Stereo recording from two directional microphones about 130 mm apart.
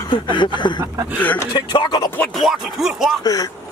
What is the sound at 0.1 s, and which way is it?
Speech, 35° left (ahead or behind).